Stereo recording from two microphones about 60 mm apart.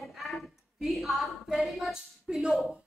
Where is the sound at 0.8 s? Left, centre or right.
Centre.